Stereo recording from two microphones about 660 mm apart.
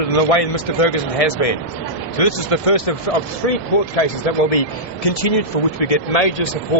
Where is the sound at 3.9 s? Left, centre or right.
Left.